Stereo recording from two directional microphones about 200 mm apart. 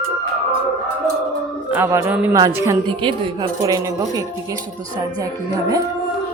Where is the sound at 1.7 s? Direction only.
10° right (ahead or behind).